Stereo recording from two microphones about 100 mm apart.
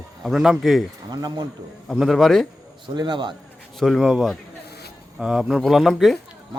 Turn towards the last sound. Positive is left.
turn(degrees=0)  # may be behind; listen again after turning